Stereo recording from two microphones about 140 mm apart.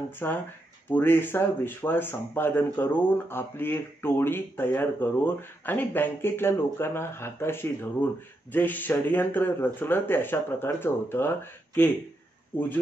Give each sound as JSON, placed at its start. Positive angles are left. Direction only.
{"t": 0.2, "sound": "speech", "side_deg": 15}